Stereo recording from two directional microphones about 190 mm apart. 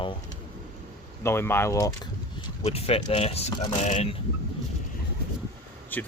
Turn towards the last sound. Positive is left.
turn(degrees=10)  # may be behind; listen again after turning